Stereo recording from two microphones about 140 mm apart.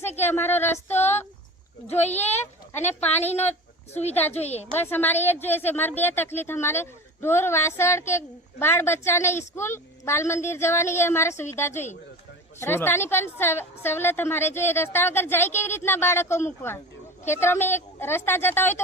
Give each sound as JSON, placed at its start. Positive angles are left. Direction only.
{"t": 0.2, "sound": "a woman's voice", "side_deg": 15}
{"t": 1.9, "sound": "speech", "side_deg": 50}
{"t": 3.2, "sound": "a woman's voice", "side_deg": 15}
{"t": 3.9, "sound": "speech", "side_deg": 50}
{"t": 4.7, "sound": "a woman's voice", "side_deg": 15}